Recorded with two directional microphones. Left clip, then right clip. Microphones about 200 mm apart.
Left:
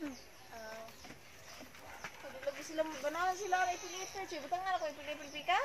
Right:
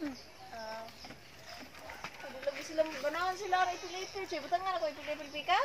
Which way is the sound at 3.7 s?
55° left (ahead or behind).